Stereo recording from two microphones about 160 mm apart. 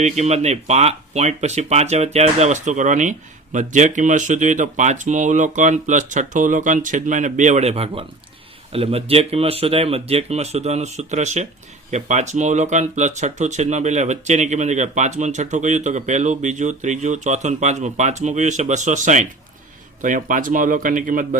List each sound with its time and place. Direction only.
0.0 s speech: 45° right (ahead or behind)